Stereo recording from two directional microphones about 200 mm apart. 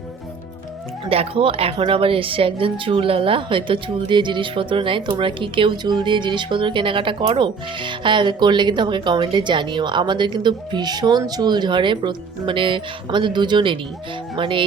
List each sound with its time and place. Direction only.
1.1 s speech: 30° right (ahead or behind)